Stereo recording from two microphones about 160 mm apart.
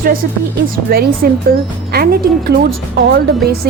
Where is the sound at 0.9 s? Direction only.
70° right (ahead or behind).